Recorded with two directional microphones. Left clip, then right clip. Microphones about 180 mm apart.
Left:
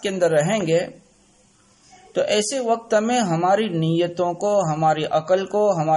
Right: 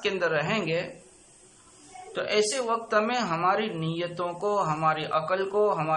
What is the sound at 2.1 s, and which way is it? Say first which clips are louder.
A man's voice: left 5 dB; 45° left (ahead or behind).